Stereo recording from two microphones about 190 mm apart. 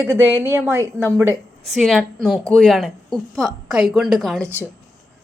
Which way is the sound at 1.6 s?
Centre (ahead or behind).